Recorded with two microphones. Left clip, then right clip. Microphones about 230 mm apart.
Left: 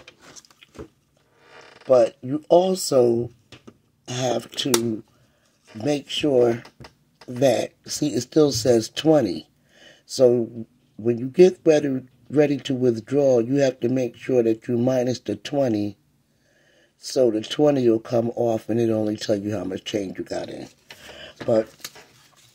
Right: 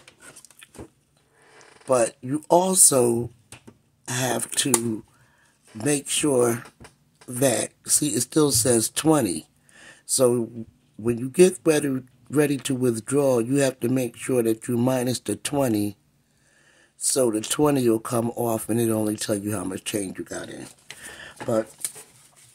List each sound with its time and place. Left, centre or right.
1.9 s speech: centre
5.8 s speech: centre
17.0 s speech: centre
21.2 s a sound: centre